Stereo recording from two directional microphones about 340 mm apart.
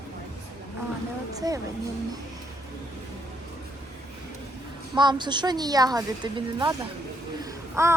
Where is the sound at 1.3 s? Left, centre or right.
Centre.